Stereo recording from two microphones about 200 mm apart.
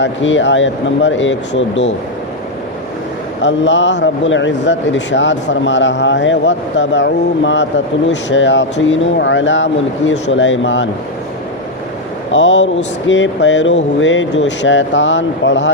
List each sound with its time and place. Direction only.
0.0 s speech: 70° left (ahead or behind)
3.4 s speech: 65° left (ahead or behind)
12.3 s speech: 65° left (ahead or behind)